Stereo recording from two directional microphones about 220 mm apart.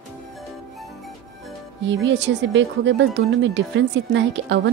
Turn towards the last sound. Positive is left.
turn(degrees=-55)  # may be behind; listen again after turning